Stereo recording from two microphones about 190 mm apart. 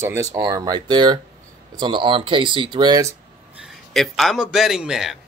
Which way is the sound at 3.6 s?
Centre (ahead or behind).